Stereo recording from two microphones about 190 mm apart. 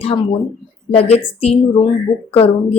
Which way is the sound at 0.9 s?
30° left (ahead or behind).